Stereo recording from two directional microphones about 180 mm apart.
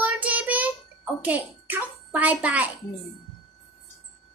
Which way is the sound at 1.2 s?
10° right (ahead or behind).